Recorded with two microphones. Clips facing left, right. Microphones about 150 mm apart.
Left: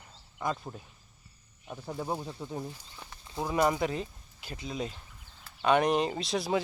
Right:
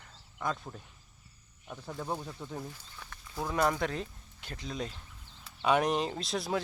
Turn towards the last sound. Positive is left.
turn(degrees=0)  # may be behind; listen again after turning